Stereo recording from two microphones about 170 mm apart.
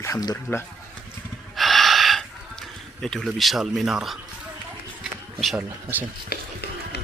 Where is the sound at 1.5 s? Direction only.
Centre (ahead or behind).